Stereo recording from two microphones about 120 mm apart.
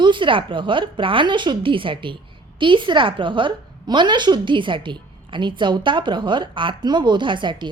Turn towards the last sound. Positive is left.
turn(degrees=-40)  # may be behind; listen again after turning